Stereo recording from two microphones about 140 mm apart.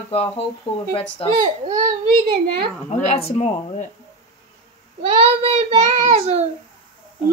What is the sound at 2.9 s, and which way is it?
A woman's voice, 50° left (ahead or behind).